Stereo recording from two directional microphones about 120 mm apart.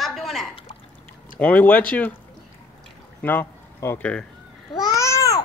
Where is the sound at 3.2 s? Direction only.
15° left (ahead or behind).